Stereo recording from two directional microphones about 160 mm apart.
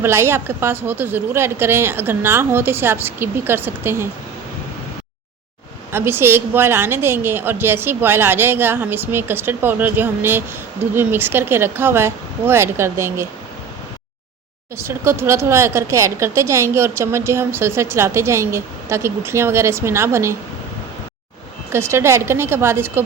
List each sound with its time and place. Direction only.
0.0 s a woman's voice: 15° right (ahead or behind)
5.9 s a woman's voice: 15° right (ahead or behind)
14.8 s a woman's voice: 15° right (ahead or behind)
21.7 s a woman's voice: 15° right (ahead or behind)